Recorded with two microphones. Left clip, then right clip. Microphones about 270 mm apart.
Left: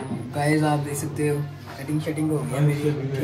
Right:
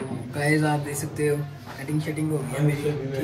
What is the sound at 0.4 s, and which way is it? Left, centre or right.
Speech, centre.